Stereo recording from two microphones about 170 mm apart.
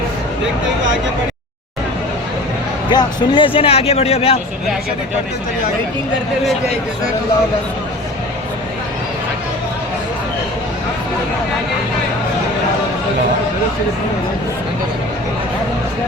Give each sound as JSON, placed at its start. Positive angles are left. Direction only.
{"t": 2.9, "sound": "speech", "side_deg": 25}